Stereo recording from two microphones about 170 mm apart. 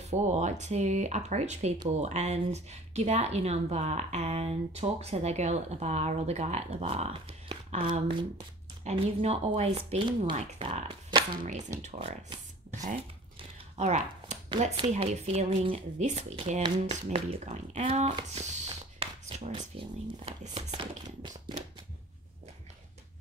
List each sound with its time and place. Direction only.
0.0 s speech: 40° right (ahead or behind)
13.7 s a sound: 40° right (ahead or behind)
14.9 s speech: 40° right (ahead or behind)
21.2 s tap: 25° right (ahead or behind)